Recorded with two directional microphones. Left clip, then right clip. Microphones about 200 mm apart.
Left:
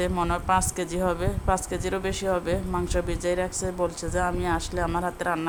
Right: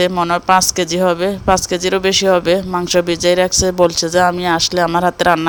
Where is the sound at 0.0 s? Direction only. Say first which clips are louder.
Right 12 dB; 30° right (ahead or behind).